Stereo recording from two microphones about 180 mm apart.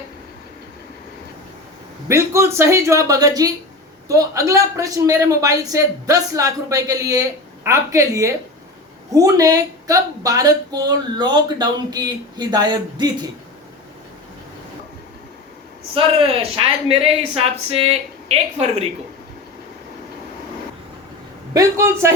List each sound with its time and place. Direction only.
2.0 s a man's voice: 15° right (ahead or behind)
16.0 s speech: 30° right (ahead or behind)
21.5 s a man's voice: 15° right (ahead or behind)